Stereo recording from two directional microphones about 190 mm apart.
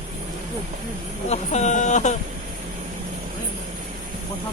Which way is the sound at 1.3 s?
35° left (ahead or behind).